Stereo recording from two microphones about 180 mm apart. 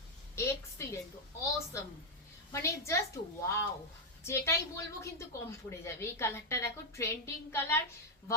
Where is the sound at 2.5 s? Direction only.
15° left (ahead or behind).